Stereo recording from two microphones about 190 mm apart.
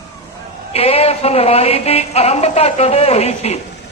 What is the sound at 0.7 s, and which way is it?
Music, 30° left (ahead or behind).